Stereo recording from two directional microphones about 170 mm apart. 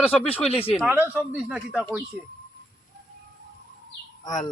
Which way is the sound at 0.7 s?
10° right (ahead or behind).